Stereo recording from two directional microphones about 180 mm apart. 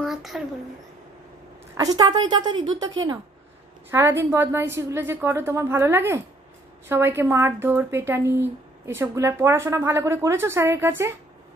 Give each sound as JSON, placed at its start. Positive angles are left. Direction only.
{"t": 0.0, "sound": "speech", "side_deg": 0}
{"t": 1.8, "sound": "a woman's voice", "side_deg": -20}
{"t": 3.9, "sound": "speech", "side_deg": -15}